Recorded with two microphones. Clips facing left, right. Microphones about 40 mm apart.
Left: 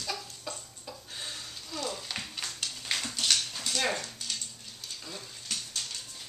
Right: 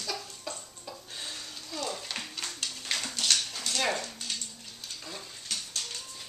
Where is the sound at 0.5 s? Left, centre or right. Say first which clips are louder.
Right 1 dB; centre.